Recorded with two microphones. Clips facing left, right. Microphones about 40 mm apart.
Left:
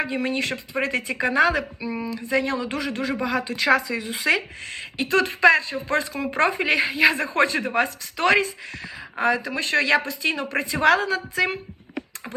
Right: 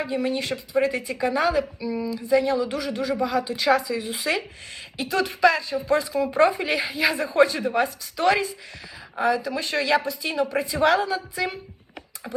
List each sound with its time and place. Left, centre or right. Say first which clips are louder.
0.0 s speech: left 1 dB; left
1.2 s a woman's voice: left 2 dB; left
2.1 s speech: right 3 dB; left
7.2 s speech: right 2 dB; left